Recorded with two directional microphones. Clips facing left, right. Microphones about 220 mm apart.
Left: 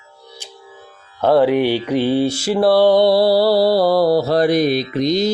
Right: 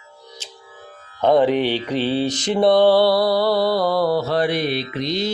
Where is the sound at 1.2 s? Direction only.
5° left (ahead or behind).